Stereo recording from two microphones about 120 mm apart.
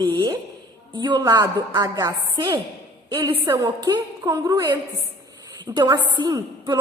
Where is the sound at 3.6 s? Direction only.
35° right (ahead or behind).